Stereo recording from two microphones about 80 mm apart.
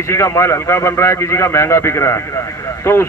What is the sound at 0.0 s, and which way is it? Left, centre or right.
A man's voice, left.